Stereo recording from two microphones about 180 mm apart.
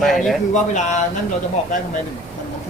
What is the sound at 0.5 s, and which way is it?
Speech, 40° left (ahead or behind).